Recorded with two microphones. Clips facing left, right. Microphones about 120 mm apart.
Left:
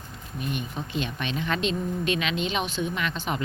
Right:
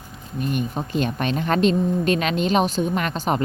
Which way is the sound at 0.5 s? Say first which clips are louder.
Right 7 dB; 45° right (ahead or behind).